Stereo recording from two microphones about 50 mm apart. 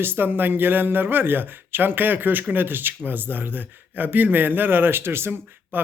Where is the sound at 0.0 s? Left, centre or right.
Right.